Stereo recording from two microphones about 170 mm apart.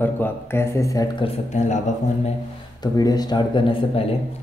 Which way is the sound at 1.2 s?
40° left (ahead or behind).